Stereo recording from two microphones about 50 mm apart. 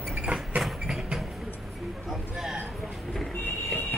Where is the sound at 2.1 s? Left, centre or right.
Centre.